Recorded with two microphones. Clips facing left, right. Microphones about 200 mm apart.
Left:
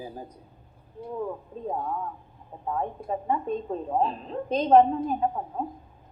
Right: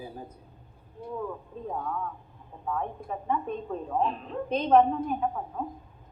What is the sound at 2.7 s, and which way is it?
A woman's voice, 35° left (ahead or behind).